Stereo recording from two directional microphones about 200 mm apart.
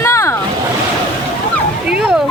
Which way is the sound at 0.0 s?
15° left (ahead or behind).